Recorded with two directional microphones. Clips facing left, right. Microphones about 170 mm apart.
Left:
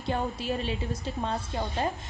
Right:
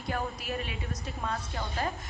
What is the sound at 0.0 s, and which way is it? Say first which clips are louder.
A woman's voice: left 4 dB; 30° left (ahead or behind).